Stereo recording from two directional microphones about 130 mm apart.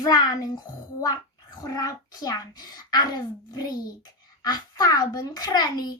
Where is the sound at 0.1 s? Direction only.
30° left (ahead or behind).